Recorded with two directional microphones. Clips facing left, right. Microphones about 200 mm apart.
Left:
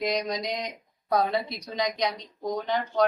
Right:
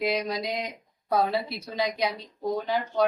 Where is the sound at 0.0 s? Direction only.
5° right (ahead or behind).